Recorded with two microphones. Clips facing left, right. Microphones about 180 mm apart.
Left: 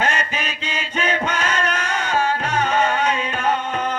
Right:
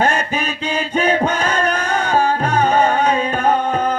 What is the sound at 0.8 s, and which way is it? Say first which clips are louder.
Chant: right 6 dB; 35° right (ahead or behind).